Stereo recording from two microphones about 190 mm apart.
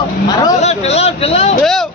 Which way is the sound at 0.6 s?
35° left (ahead or behind).